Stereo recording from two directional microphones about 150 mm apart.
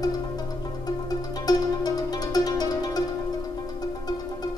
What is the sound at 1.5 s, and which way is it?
Music, 25° left (ahead or behind).